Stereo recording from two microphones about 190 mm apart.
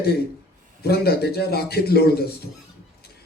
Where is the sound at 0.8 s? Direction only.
55° left (ahead or behind).